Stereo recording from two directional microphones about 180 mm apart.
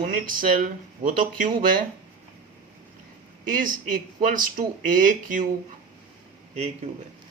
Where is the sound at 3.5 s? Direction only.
50° right (ahead or behind).